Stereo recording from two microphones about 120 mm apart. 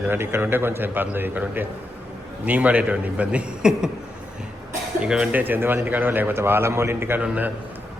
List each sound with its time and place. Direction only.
0.1 s speech: 20° right (ahead or behind)
4.9 s speech: 5° right (ahead or behind)